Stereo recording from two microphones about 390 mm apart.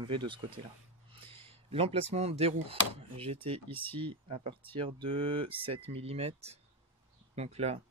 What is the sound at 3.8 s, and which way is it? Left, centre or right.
Speech, centre.